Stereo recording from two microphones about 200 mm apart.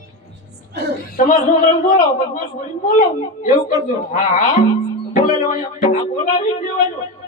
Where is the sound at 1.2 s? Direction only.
40° left (ahead or behind).